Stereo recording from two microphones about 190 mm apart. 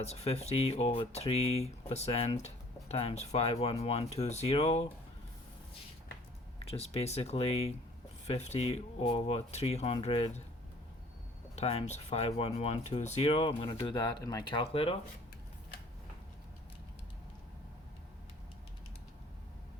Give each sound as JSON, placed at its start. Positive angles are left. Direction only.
{"t": 0.0, "sound": "speech", "side_deg": 35}
{"t": 6.6, "sound": "speech", "side_deg": 30}
{"t": 11.5, "sound": "speech", "side_deg": 35}